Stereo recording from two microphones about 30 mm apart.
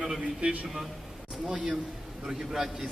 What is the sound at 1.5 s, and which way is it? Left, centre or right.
A man's voice, right.